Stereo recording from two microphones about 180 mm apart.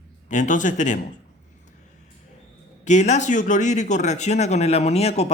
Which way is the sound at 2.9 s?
40° left (ahead or behind).